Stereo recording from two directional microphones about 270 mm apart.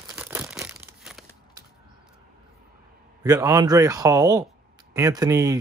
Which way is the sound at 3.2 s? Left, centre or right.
Centre.